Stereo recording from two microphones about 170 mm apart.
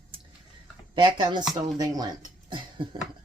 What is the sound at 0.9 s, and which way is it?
Speech, 25° right (ahead or behind).